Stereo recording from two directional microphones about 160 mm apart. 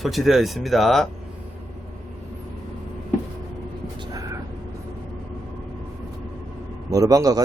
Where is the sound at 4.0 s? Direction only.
20° right (ahead or behind).